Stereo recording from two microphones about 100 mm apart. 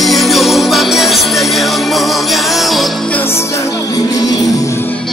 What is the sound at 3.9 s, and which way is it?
Music, 40° left (ahead or behind).